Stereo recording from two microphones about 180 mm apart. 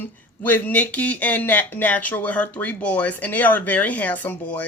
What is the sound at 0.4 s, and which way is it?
Speech, 10° left (ahead or behind).